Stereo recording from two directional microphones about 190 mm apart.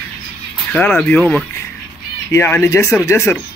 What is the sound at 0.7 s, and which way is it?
Speech, 5° left (ahead or behind).